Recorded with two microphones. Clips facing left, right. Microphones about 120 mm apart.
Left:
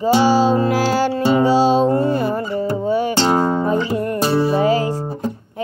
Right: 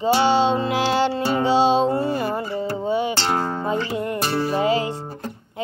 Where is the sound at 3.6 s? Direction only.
50° left (ahead or behind).